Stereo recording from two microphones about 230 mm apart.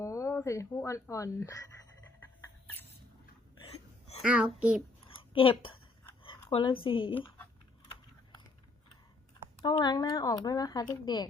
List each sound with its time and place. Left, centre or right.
0.0 s speech: centre
3.6 s hiccup: left
4.2 s a child's voice: centre
5.0 s a sound: left
6.8 s speech: left
9.6 s speech: centre